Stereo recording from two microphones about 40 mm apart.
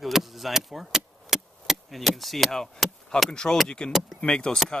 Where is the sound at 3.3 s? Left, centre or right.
Centre.